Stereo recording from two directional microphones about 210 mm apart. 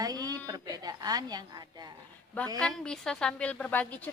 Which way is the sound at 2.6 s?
5° left (ahead or behind).